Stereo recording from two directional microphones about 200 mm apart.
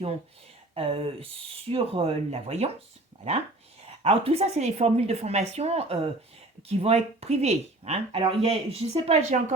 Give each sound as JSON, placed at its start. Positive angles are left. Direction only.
{"t": 0.7, "sound": "speech", "side_deg": -30}
{"t": 4.0, "sound": "speech", "side_deg": -30}